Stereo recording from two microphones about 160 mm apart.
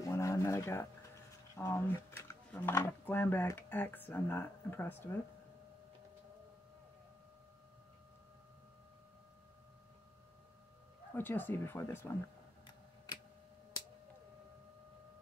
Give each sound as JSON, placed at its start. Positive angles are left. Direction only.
{"t": 0.0, "sound": "speech", "side_deg": 20}
{"t": 11.1, "sound": "speech", "side_deg": 10}